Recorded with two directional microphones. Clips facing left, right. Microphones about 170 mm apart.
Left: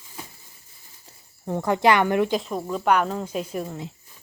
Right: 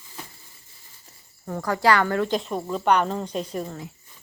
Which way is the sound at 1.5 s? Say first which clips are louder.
Left 2 dB; 20° left (ahead or behind).